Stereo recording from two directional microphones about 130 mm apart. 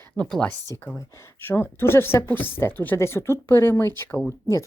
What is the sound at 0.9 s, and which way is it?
Speech, 20° left (ahead or behind).